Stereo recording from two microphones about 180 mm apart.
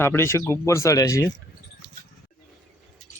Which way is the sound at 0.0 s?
15° left (ahead or behind).